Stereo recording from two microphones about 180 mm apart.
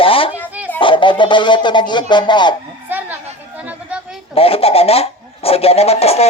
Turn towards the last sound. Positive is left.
turn(degrees=35)  # may be behind; listen again after turning